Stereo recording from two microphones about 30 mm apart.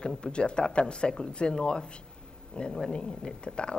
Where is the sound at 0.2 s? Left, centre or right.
Left.